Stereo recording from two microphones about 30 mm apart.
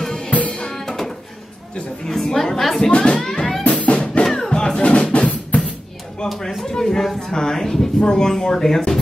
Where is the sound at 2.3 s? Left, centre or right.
Centre.